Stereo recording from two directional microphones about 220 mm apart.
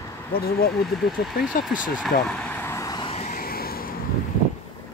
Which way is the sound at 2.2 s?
5° left (ahead or behind).